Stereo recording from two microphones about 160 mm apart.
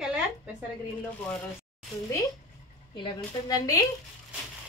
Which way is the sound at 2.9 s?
25° left (ahead or behind).